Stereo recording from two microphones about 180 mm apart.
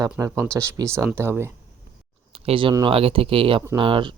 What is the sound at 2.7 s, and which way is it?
Speech, 30° right (ahead or behind).